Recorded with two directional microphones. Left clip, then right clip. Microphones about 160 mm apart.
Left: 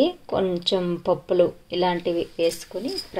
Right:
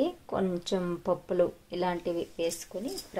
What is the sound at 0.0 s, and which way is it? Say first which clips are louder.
A woman's voice: left 8 dB; 10° left (ahead or behind).